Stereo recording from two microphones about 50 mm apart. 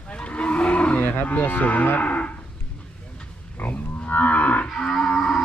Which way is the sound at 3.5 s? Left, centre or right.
Left.